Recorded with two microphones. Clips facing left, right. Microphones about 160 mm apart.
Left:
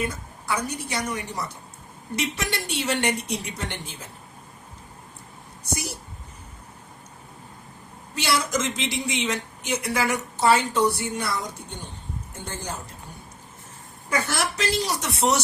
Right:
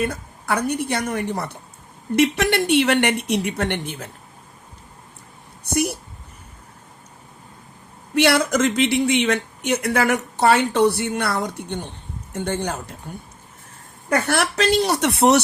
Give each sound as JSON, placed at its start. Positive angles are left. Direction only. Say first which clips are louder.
{"t": 0.0, "sound": "speech", "louder": "right 5 dB", "side_deg": -60}
{"t": 5.7, "sound": "speech", "louder": "right 10 dB", "side_deg": -65}
{"t": 8.1, "sound": "speech", "louder": "right 7 dB", "side_deg": -65}
{"t": 14.1, "sound": "speech", "louder": "right 6 dB", "side_deg": -65}